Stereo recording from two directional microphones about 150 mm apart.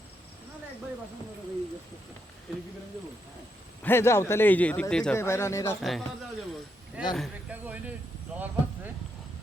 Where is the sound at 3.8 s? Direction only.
15° left (ahead or behind).